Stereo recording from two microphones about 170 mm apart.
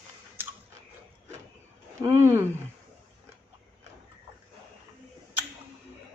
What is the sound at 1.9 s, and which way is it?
Speech, 15° right (ahead or behind).